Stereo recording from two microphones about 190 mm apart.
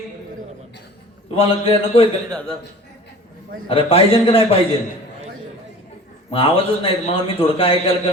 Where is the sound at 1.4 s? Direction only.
30° left (ahead or behind).